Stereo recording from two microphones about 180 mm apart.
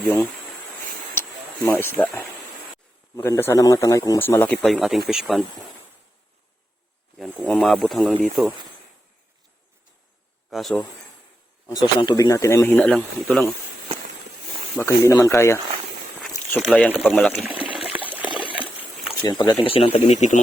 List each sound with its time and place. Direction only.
1.1 s a sound: 10° left (ahead or behind)
3.2 s speech: 15° left (ahead or behind)
4.5 s speech: centre (ahead or behind)
7.2 s speech: 5° left (ahead or behind)
10.5 s speech: centre (ahead or behind)
11.6 s speech: 20° left (ahead or behind); by 13.5 s 5° left (ahead or behind)
14.8 s speech: 15° left (ahead or behind)
17.7 s water: 5° right (ahead or behind)
18.3 s a sound: 25° left (ahead or behind)
18.5 s a sound: 5° right (ahead or behind)
19.2 s speech: 25° left (ahead or behind); by 20.4 s 40° left (ahead or behind)